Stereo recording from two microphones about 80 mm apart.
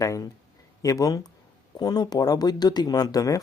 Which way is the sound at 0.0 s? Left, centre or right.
Left.